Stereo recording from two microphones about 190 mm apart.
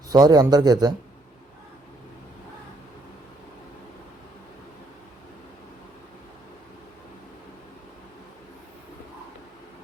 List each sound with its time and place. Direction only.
0.1 s speech: 20° right (ahead or behind)